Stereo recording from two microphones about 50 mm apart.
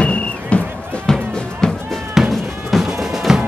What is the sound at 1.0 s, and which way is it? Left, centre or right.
Music, centre.